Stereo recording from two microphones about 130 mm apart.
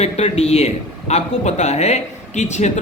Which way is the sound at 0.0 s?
50° left (ahead or behind).